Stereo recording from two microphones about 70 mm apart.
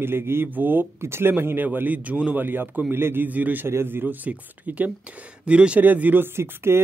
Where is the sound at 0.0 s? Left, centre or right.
Right.